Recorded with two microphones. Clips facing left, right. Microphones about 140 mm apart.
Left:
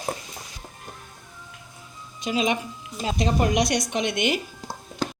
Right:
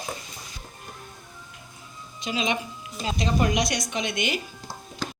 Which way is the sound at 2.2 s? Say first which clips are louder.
Left 3 dB; 50° left (ahead or behind).